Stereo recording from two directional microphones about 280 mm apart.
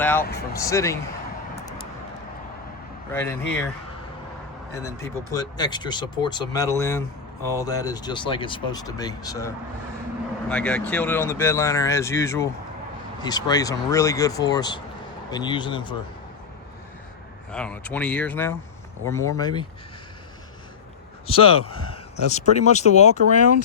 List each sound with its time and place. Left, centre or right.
0.0 s speech: centre
3.1 s speech: centre
4.7 s speech: centre
10.5 s speech: centre
17.5 s speech: centre
21.2 s speech: centre